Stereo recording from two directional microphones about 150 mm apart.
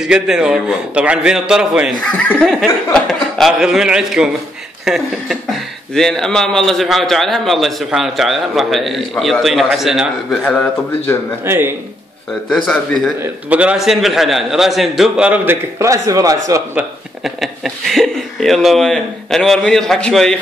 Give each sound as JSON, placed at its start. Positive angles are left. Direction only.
{"t": 0.0, "sound": "speech", "side_deg": -5}
{"t": 11.4, "sound": "speech", "side_deg": -15}
{"t": 12.6, "sound": "speech", "side_deg": 5}
{"t": 13.2, "sound": "speech", "side_deg": -10}
{"t": 15.8, "sound": "speech", "side_deg": -20}
{"t": 16.7, "sound": "speech", "side_deg": 0}